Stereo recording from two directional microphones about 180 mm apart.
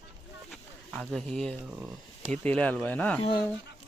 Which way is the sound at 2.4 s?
10° left (ahead or behind).